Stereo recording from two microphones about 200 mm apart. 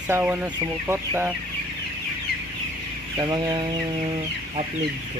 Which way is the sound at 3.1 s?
20° right (ahead or behind).